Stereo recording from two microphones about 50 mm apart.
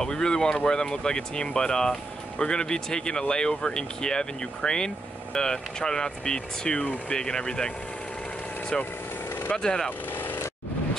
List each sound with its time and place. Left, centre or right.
0.0 s speech: centre
8.7 s speech: centre
9.8 s a sound: left